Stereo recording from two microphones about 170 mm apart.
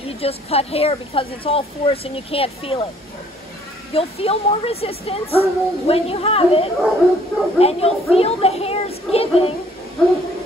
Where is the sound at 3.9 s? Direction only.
35° left (ahead or behind).